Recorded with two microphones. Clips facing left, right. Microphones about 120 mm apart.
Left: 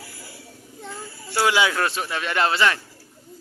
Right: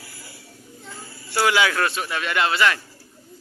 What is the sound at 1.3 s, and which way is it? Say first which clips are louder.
A man's voice: even; 20° left (ahead or behind).